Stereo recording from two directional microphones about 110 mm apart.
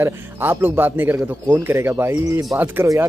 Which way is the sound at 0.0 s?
20° right (ahead or behind).